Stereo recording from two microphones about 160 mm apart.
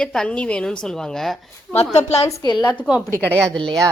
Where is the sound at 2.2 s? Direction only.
20° left (ahead or behind).